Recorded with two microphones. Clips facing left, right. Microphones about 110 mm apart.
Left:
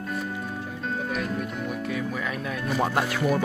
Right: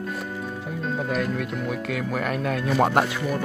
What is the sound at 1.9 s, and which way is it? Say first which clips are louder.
Speech: right 3 dB; 70° right (ahead or behind).